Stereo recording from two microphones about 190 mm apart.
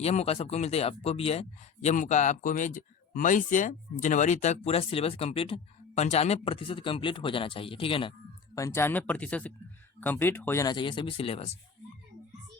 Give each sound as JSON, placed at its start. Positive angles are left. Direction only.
{"t": 0.0, "sound": "a man's voice", "side_deg": 35}
{"t": 8.5, "sound": "speech", "side_deg": 15}